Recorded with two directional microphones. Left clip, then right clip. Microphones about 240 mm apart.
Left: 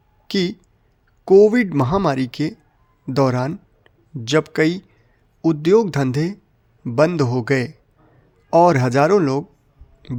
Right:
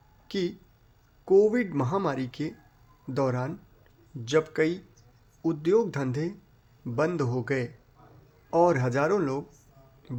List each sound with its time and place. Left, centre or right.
0.3 s speech: left